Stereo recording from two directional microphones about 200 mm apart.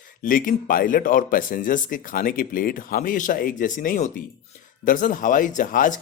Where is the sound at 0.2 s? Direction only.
45° left (ahead or behind).